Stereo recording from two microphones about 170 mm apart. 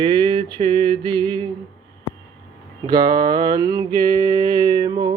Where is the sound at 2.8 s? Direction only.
25° right (ahead or behind).